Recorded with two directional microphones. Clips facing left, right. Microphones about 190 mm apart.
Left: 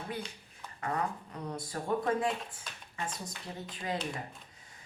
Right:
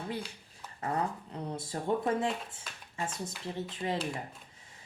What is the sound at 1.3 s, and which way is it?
Speech, 25° right (ahead or behind).